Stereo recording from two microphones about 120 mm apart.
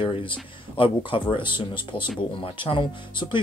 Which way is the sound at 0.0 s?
45° left (ahead or behind).